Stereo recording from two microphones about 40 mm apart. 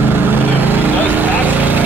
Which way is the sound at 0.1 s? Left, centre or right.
Right.